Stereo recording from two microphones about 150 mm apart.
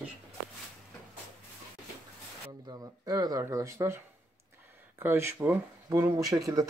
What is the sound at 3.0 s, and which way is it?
Speech, 25° right (ahead or behind).